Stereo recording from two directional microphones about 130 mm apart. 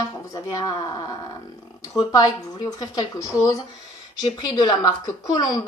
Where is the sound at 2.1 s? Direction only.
30° left (ahead or behind).